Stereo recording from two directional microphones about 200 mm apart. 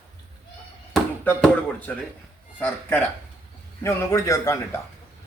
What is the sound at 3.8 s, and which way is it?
Speech, 15° left (ahead or behind).